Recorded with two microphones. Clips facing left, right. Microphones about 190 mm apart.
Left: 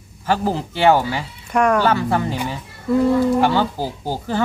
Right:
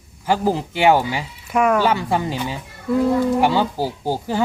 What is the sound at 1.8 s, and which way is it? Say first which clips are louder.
Speech: left 1 dB; 15° right (ahead or behind).